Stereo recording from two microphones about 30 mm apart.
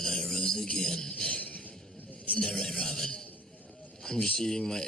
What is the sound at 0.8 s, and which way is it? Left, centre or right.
Music, centre.